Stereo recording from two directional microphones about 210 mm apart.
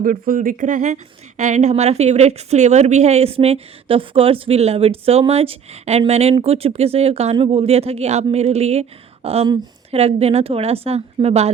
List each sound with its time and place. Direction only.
0.0 s a woman's voice: 40° right (ahead or behind)